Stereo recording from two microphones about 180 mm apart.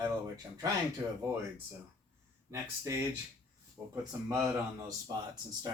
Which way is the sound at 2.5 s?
15° right (ahead or behind).